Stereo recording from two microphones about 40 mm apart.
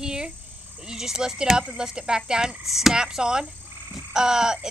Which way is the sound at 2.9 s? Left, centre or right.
Centre.